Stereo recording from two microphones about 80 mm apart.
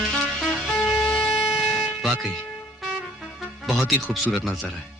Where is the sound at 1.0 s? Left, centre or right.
Centre.